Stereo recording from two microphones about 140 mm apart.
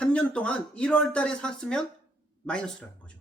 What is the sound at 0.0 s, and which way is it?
Speech, 10° left (ahead or behind).